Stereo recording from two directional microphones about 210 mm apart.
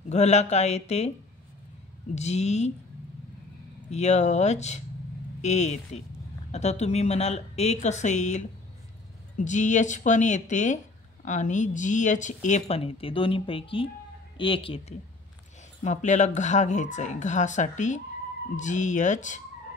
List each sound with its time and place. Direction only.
0.1 s speech: 30° left (ahead or behind)
2.1 s speech: 30° left (ahead or behind)
3.9 s a woman's voice: 30° left (ahead or behind)